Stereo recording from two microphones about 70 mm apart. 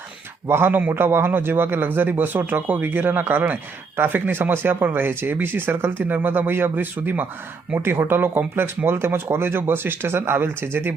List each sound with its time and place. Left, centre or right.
0.4 s a man's voice: right